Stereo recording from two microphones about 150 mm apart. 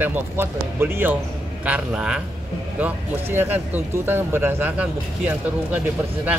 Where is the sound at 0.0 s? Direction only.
15° right (ahead or behind).